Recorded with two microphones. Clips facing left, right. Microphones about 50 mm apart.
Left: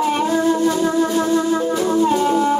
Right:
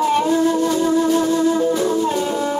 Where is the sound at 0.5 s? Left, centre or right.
Left.